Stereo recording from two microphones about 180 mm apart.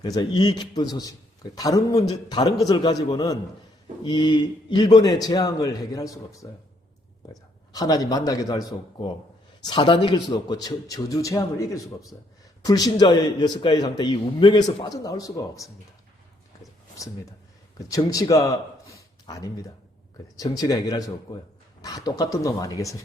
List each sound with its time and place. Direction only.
0.0 s a man's voice: 25° left (ahead or behind)
7.7 s a man's voice: 20° left (ahead or behind)
16.9 s a man's voice: 20° left (ahead or behind)